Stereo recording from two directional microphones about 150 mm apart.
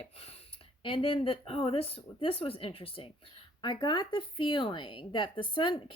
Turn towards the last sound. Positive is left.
turn(degrees=35)  # may be behind; listen again after turning